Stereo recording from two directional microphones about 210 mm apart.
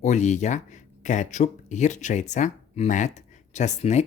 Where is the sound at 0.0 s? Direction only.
35° left (ahead or behind).